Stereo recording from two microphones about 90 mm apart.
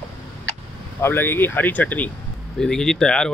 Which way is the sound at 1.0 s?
25° left (ahead or behind).